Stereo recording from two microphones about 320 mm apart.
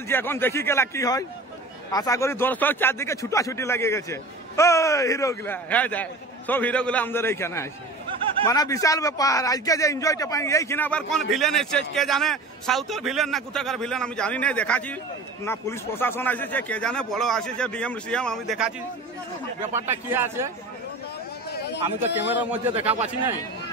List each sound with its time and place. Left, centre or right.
0.1 s a man's voice: centre
20.1 s speech: centre
21.5 s a sound: left
22.3 s a man's voice: centre
22.8 s speech: centre